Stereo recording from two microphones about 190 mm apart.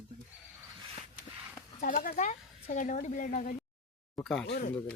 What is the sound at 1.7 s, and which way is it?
Speech, 45° left (ahead or behind).